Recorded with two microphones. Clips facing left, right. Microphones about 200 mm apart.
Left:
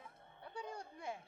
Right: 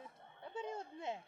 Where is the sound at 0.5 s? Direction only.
25° right (ahead or behind).